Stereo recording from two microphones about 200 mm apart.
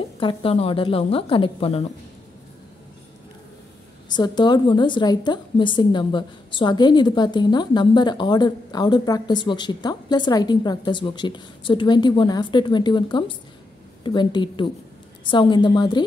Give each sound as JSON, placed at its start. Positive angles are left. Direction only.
{"t": 0.2, "sound": "a woman's voice", "side_deg": 25}
{"t": 4.1, "sound": "a woman's voice", "side_deg": 20}